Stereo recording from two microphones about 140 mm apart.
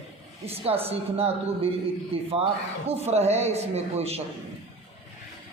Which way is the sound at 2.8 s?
50° right (ahead or behind).